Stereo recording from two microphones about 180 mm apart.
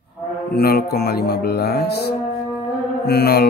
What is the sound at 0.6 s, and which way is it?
A man's voice, 60° left (ahead or behind).